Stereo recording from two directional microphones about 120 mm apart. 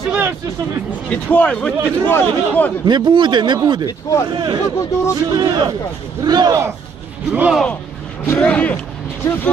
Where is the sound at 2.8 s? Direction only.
40° right (ahead or behind).